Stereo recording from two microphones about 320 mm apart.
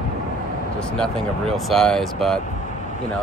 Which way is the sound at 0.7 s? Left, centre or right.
Centre.